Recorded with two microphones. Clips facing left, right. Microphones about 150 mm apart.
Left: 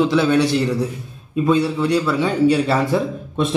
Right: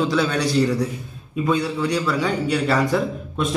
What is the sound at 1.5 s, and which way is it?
A man's voice, 5° left (ahead or behind).